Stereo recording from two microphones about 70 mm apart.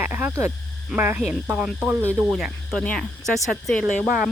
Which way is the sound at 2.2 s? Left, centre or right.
Centre.